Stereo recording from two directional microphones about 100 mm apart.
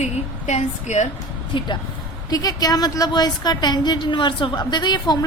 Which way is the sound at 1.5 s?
60° left (ahead or behind).